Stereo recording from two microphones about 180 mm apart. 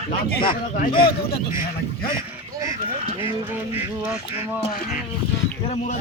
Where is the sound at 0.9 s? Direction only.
30° left (ahead or behind).